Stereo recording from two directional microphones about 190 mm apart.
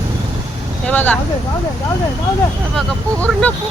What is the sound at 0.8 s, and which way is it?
Speech, 10° left (ahead or behind).